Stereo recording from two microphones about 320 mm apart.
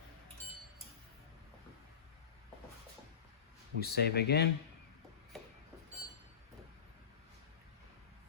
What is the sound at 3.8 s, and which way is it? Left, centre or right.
Speech, left.